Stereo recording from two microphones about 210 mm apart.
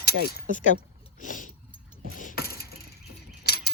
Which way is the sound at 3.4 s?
50° left (ahead or behind).